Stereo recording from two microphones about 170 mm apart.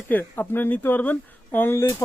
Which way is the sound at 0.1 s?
10° left (ahead or behind).